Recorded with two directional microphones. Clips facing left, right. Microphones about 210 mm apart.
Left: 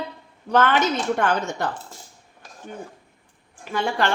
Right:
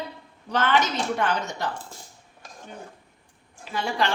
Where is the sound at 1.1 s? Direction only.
50° left (ahead or behind).